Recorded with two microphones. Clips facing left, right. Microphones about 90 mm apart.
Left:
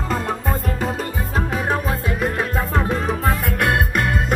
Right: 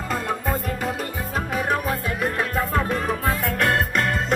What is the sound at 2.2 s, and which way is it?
Music, 20° left (ahead or behind).